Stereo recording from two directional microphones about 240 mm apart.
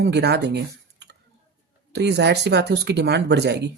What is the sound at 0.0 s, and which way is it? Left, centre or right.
Speech, right.